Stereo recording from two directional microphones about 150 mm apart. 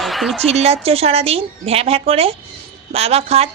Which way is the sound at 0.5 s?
45° right (ahead or behind).